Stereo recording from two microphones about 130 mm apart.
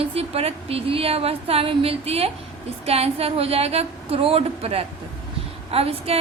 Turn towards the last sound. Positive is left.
turn(degrees=-50)  # may be behind; listen again after turning